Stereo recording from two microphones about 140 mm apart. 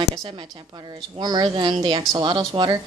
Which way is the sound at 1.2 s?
30° right (ahead or behind).